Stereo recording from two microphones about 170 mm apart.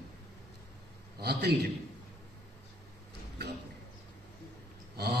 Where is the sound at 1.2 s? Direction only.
70° right (ahead or behind).